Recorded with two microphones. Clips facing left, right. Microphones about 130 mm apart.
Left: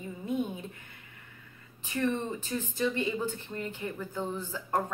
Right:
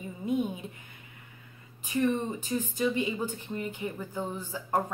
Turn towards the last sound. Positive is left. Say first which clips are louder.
# right 1 dB
turn(degrees=-10)  # may be behind; listen again after turning